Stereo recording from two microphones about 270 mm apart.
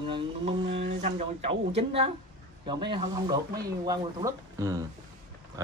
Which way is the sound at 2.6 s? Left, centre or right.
Centre.